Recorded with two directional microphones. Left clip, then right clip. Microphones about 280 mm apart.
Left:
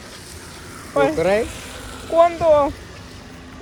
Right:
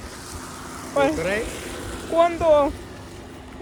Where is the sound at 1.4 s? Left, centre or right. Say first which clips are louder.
Left 3 dB; right.